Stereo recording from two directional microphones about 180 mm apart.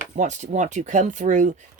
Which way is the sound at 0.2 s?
40° right (ahead or behind).